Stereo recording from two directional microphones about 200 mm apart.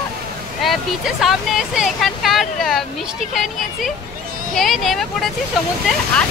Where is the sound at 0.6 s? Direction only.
Centre (ahead or behind).